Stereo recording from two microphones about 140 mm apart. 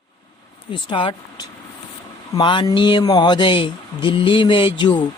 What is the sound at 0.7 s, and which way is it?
Speech, 35° left (ahead or behind).